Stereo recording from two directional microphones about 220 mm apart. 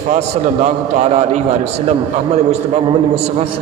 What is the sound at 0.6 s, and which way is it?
Speech, 30° right (ahead or behind).